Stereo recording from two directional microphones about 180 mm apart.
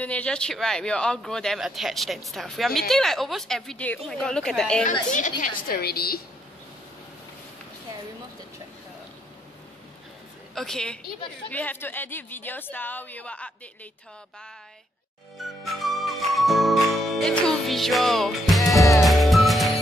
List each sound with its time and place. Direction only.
0.0 s speech: 5° left (ahead or behind)
5.6 s a woman's voice: 55° left (ahead or behind)
10.5 s speech: centre (ahead or behind)
15.3 s music: centre (ahead or behind)